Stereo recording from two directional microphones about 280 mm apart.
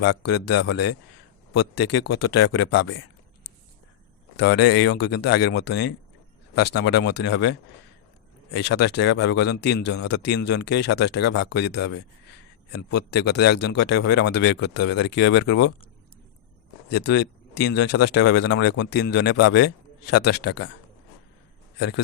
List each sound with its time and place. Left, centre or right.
0.3 s speech: left
1.5 s speech: left
2.2 s speech: left
4.4 s speech: left
8.5 s speech: left
16.9 s speech: left
21.8 s a man's voice: left